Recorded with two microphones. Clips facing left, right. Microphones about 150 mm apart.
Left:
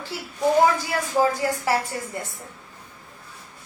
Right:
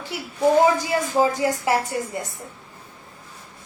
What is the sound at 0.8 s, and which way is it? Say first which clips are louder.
A woman's voice: right 2 dB; 20° right (ahead or behind).